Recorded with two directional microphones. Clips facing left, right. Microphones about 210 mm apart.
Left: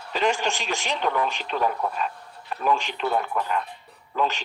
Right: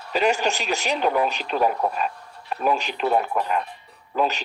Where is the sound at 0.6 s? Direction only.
15° right (ahead or behind).